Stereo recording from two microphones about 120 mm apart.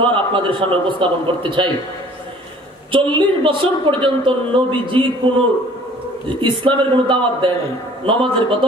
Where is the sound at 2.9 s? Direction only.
45° right (ahead or behind).